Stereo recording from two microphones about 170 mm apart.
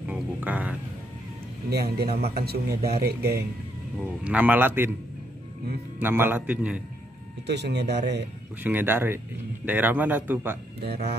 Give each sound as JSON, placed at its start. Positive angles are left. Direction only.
{"t": 0.0, "sound": "music", "side_deg": -10}
{"t": 1.7, "sound": "speech", "side_deg": -70}
{"t": 4.2, "sound": "speech", "side_deg": -10}
{"t": 5.9, "sound": "speech", "side_deg": -10}
{"t": 7.4, "sound": "speech", "side_deg": -80}
{"t": 8.6, "sound": "speech", "side_deg": -10}
{"t": 10.8, "sound": "speech", "side_deg": -70}